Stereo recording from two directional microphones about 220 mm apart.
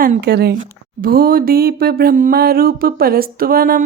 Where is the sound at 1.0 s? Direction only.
40° right (ahead or behind).